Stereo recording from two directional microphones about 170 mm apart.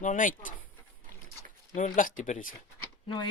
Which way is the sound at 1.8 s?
50° left (ahead or behind).